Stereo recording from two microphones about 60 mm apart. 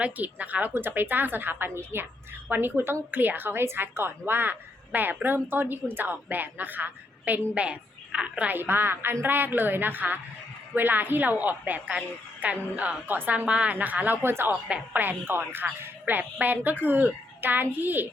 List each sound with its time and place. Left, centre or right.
0.0 s a woman's voice: right
0.7 s a woman's voice: right
7.5 s a woman's voice: centre
8.5 s a woman's voice: right
14.2 s a woman's voice: right